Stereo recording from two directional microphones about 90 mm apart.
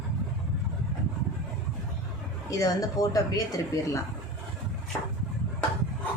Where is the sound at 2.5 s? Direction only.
40° left (ahead or behind).